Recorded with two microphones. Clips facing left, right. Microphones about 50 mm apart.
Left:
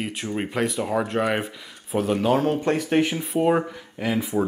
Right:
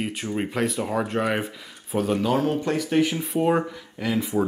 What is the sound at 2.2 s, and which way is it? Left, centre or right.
Speech, left.